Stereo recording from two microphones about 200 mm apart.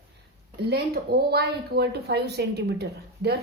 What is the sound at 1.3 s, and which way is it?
A woman's voice, 55° right (ahead or behind).